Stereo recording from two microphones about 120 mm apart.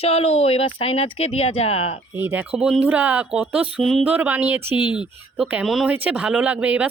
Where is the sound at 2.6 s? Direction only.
5° right (ahead or behind).